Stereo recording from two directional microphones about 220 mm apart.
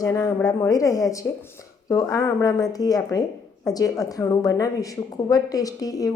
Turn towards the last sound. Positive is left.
turn(degrees=15)  # may be behind; listen again after turning